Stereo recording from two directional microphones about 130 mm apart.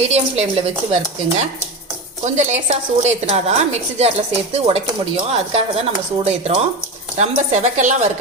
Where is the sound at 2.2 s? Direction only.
60° right (ahead or behind).